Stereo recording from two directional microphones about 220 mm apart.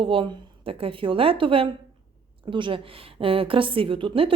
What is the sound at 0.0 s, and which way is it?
A woman's voice, 25° right (ahead or behind).